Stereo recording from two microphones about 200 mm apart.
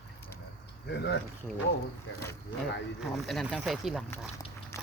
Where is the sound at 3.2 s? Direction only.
Centre (ahead or behind).